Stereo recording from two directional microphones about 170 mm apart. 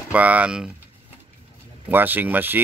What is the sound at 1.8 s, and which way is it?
Speech, 10° right (ahead or behind).